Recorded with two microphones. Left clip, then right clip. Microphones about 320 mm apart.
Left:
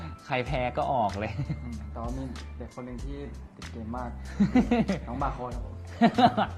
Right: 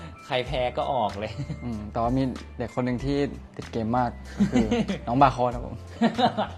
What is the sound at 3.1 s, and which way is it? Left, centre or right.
Speech, right.